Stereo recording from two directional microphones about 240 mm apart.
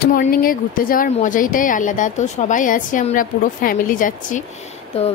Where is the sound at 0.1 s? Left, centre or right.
Left.